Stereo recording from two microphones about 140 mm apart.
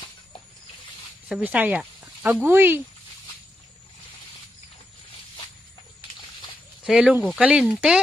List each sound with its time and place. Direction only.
1.3 s speech: 10° right (ahead or behind)
6.8 s speech: 5° right (ahead or behind)